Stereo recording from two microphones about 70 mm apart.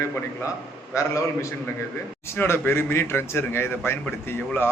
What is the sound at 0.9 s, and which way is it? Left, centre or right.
Speech, left.